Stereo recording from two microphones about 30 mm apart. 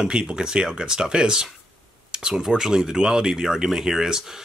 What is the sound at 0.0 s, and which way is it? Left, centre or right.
A man's voice, right.